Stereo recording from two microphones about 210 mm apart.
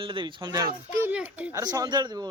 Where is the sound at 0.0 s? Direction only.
25° right (ahead or behind).